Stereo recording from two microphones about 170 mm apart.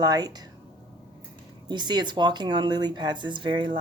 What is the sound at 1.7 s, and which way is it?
A woman's voice, 25° right (ahead or behind).